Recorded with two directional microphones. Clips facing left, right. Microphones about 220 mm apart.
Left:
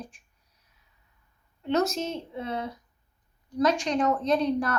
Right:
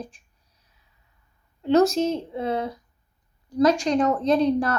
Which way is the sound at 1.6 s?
35° right (ahead or behind).